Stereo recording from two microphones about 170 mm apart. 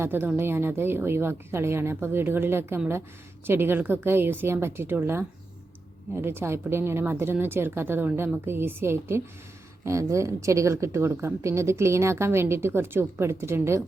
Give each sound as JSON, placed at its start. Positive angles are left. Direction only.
{"t": 0.0, "sound": "a woman's voice", "side_deg": -10}
{"t": 6.2, "sound": "a woman's voice", "side_deg": -15}